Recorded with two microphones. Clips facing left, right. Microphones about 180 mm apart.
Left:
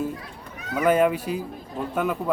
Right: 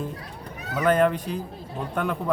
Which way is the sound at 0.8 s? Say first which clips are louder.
Left 1 dB; 10° left (ahead or behind).